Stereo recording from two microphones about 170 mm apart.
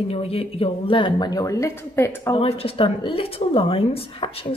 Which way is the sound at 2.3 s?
35° left (ahead or behind).